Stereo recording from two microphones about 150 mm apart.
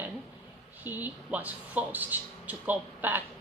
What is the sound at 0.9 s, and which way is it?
Speech, 10° right (ahead or behind).